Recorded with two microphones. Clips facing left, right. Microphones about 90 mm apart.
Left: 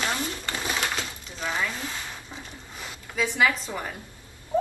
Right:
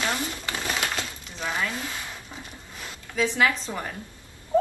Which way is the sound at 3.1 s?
5° left (ahead or behind).